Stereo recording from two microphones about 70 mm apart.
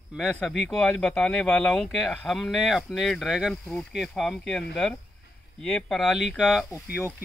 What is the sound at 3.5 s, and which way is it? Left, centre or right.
Speech, centre.